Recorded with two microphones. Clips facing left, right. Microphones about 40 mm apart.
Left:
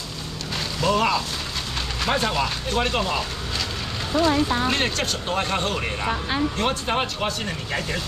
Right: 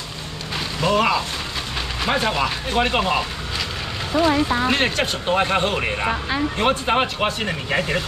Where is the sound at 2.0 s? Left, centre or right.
Centre.